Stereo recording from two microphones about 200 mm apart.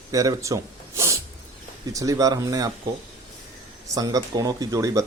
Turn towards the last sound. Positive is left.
turn(degrees=-15)  # may be behind; listen again after turning